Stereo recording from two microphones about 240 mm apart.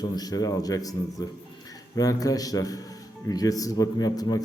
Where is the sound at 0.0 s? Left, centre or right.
Centre.